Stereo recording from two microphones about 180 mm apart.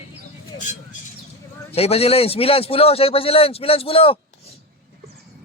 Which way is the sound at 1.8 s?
35° left (ahead or behind).